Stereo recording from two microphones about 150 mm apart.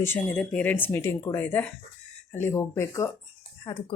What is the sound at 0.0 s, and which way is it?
Speech, 10° left (ahead or behind).